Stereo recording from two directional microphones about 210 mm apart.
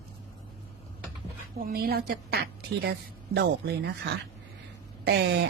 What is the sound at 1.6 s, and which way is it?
A woman's voice, 45° right (ahead or behind).